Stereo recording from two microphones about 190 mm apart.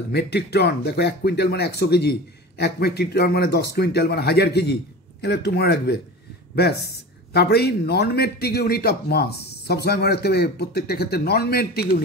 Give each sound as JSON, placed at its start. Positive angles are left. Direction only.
{"t": 0.1, "sound": "speech", "side_deg": 60}